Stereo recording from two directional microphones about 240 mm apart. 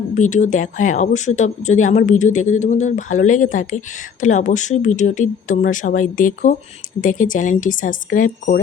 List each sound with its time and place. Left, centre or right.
0.1 s speech: left